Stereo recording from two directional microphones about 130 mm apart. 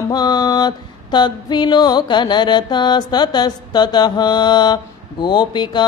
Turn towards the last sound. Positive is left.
turn(degrees=35)  # may be behind; listen again after turning